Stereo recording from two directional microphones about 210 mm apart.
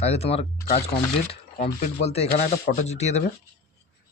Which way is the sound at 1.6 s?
40° left (ahead or behind).